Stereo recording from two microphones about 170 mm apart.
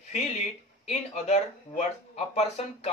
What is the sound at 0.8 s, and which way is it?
Speech, 40° left (ahead or behind).